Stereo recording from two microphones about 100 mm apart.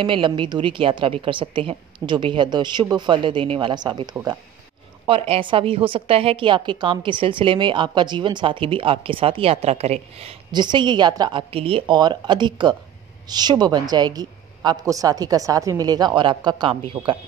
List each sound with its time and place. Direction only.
0.0 s a woman's voice: 55° right (ahead or behind)
2.0 s speech: 55° right (ahead or behind)
5.0 s a woman's voice: 65° right (ahead or behind); by 10.3 s 90° right
10.5 s speech: 50° right (ahead or behind)
11.5 s speech: 65° right (ahead or behind)
12.0 s a woman's voice: 50° right (ahead or behind)